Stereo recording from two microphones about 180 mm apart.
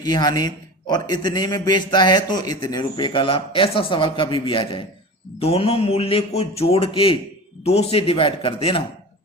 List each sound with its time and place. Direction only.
0.0 s a man's voice: 20° left (ahead or behind)